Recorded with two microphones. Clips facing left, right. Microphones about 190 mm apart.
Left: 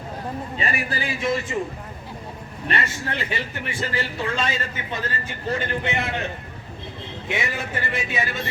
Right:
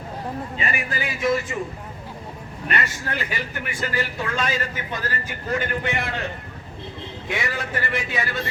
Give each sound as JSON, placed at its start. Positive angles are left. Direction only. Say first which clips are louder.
{"t": 0.6, "sound": "a man's voice", "louder": "left 2 dB", "side_deg": 35}
{"t": 2.6, "sound": "a man's voice", "louder": "even", "side_deg": 25}
{"t": 7.3, "sound": "a man's voice", "louder": "even", "side_deg": 25}